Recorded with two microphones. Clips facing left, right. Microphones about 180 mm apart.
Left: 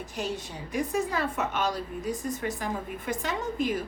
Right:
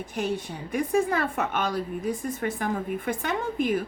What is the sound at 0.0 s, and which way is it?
A woman's voice, 55° right (ahead or behind).